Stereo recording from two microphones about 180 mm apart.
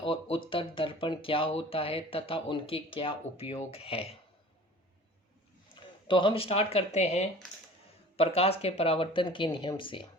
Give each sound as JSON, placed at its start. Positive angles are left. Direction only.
{"t": 0.0, "sound": "speech", "side_deg": 30}
{"t": 6.1, "sound": "speech", "side_deg": 25}